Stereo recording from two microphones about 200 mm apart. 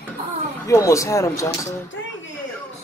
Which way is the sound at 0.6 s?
15° left (ahead or behind).